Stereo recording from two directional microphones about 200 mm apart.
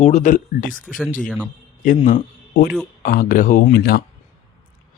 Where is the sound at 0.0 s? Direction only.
35° left (ahead or behind).